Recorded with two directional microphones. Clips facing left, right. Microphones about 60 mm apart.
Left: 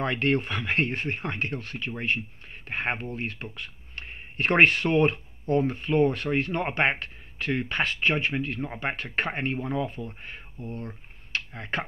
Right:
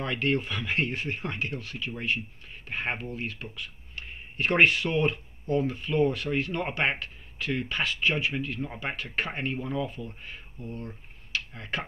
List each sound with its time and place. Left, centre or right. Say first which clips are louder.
0.0 s speech: left 3 dB; left